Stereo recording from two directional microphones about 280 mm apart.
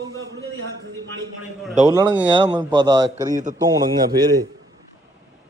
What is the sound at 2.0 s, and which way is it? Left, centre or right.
A man's voice, centre.